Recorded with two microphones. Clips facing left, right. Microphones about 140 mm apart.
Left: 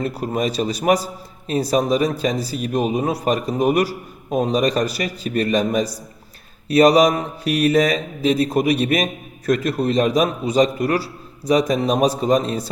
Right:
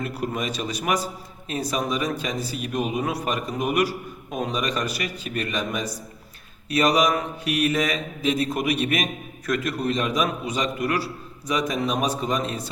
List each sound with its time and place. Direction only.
0.0 s a man's voice: 35° left (ahead or behind)